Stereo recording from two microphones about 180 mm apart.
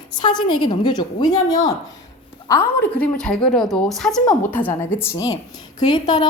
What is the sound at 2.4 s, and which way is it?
A woman's voice, 15° left (ahead or behind).